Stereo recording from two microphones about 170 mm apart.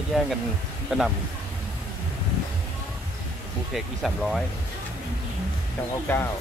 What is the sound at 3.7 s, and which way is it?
Speech, centre (ahead or behind).